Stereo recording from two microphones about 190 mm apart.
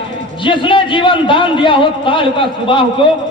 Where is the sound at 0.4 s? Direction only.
25° left (ahead or behind).